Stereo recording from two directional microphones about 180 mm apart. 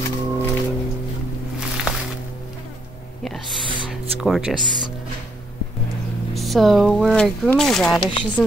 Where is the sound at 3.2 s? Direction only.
Centre (ahead or behind).